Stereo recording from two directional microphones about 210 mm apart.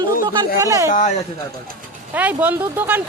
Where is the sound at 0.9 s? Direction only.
35° left (ahead or behind).